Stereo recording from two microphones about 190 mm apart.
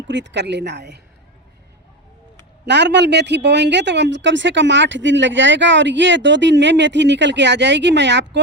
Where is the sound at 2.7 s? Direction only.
65° right (ahead or behind).